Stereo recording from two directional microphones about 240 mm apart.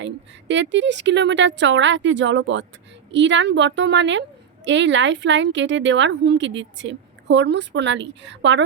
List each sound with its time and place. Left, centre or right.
0.0 s a woman's voice: right